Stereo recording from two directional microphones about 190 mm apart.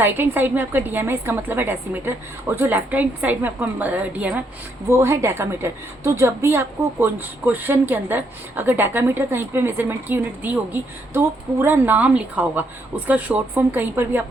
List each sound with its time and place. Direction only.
0.0 s a woman's voice: 10° right (ahead or behind)